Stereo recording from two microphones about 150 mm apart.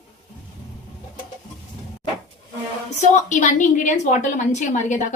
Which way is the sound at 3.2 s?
55° left (ahead or behind).